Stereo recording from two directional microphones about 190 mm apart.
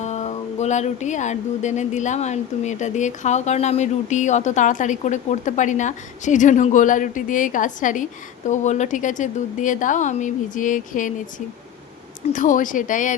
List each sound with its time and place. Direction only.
0.0 s speech: 35° left (ahead or behind)